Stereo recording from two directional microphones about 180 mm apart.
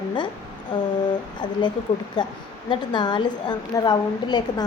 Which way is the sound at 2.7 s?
25° left (ahead or behind).